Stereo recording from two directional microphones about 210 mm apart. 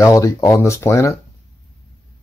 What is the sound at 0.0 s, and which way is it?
Speech, 15° left (ahead or behind).